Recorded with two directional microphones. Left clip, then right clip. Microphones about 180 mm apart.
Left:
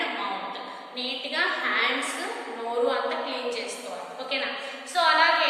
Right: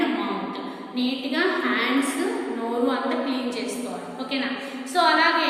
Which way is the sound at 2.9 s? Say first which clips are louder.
Right 2 dB; 10° right (ahead or behind).